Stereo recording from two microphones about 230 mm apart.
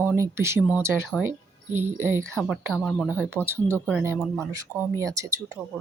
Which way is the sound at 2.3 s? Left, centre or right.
Centre.